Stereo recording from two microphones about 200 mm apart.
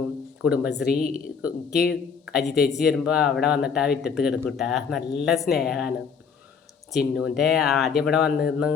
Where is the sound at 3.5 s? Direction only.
5° right (ahead or behind).